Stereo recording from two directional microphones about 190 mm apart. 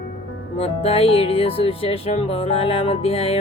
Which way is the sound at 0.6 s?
30° left (ahead or behind).